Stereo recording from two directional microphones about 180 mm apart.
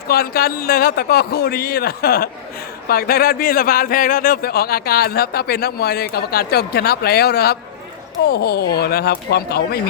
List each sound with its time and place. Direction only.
0.1 s a man's voice: 55° left (ahead or behind)